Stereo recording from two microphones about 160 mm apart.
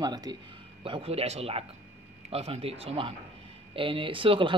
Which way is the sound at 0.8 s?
35° right (ahead or behind).